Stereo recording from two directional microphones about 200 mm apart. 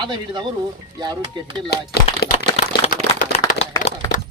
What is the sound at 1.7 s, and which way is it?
Speech, 55° left (ahead or behind).